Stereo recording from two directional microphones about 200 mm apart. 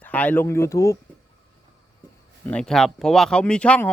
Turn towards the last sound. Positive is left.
turn(degrees=5)  # may be behind; listen again after turning